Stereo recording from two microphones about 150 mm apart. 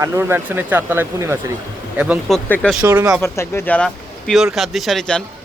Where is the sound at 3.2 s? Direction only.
15° left (ahead or behind).